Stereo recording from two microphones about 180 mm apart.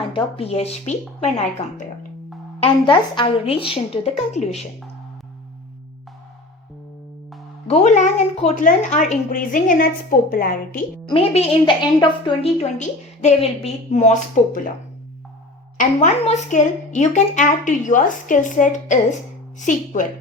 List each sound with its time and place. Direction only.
0.1 s a woman's voice: 35° left (ahead or behind)
2.6 s a woman's voice: 25° left (ahead or behind)
7.7 s a woman's voice: 40° left (ahead or behind)
11.1 s a woman's voice: 35° left (ahead or behind)
15.8 s a woman's voice: 45° left (ahead or behind)